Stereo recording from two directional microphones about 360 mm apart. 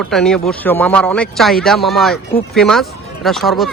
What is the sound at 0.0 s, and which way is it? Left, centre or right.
Speech, centre.